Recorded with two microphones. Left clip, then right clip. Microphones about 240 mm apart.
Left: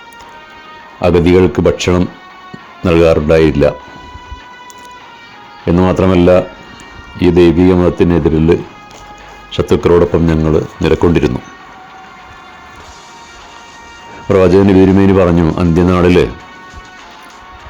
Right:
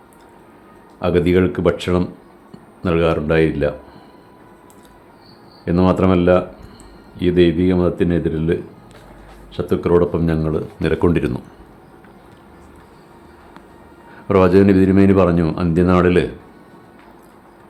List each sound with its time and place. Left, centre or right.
1.0 s speech: left
5.6 s speech: left
14.3 s speech: left